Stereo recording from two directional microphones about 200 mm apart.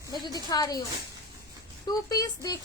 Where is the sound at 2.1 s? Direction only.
15° left (ahead or behind).